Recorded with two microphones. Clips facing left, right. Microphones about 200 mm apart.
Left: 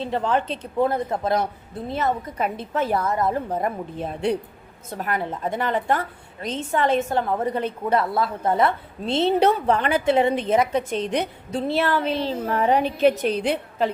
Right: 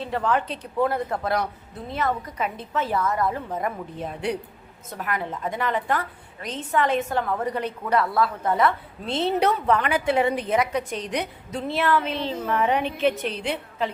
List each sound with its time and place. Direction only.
0.0 s a woman's voice: 25° left (ahead or behind)
2.4 s a woman's voice: 45° left (ahead or behind)
3.0 s a woman's voice: 25° left (ahead or behind)